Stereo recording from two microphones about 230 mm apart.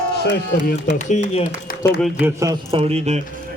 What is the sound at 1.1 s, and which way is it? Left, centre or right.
Speech, left.